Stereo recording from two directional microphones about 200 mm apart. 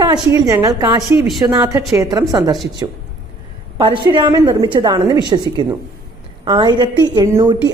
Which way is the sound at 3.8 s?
25° right (ahead or behind).